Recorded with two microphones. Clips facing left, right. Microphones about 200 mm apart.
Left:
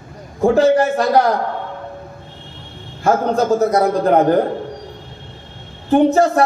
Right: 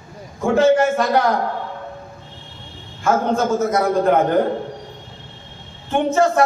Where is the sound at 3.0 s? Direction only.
35° left (ahead or behind).